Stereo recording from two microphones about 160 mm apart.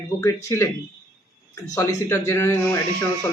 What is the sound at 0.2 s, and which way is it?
Speech, 15° left (ahead or behind).